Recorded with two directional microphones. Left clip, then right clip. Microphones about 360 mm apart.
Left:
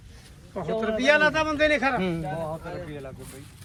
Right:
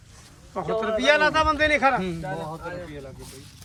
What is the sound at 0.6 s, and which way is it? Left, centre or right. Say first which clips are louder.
Speech: right 1 dB; centre.